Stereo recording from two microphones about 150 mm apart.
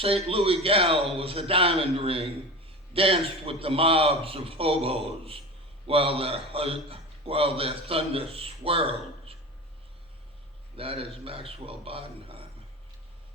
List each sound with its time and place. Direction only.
0.0 s a man's voice: 40° right (ahead or behind)
10.8 s a man's voice: 40° right (ahead or behind)